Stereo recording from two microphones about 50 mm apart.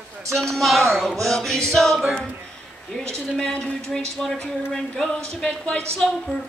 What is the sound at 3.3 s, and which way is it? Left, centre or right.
Speech, centre.